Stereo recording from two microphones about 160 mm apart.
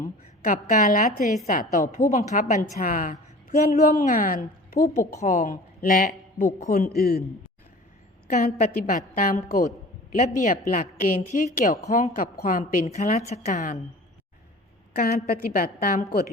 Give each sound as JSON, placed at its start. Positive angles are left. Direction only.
{"t": 0.0, "sound": "a man's voice", "side_deg": 60}
{"t": 4.0, "sound": "a woman's voice", "side_deg": 60}
{"t": 8.3, "sound": "a man's voice", "side_deg": 65}
{"t": 13.0, "sound": "a woman's voice", "side_deg": 45}
{"t": 14.9, "sound": "a woman's voice", "side_deg": 70}